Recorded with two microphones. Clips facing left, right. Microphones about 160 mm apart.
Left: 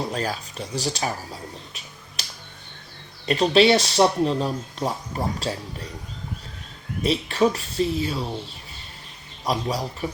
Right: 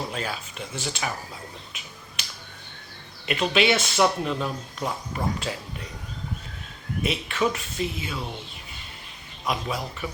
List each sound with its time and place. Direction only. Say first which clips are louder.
0.1 s speech: left 4 dB; 40° left (ahead or behind)
3.2 s speech: left 5 dB; 35° left (ahead or behind)
7.0 s speech: left 5 dB; 35° left (ahead or behind)
9.4 s speech: left 3 dB; 35° left (ahead or behind)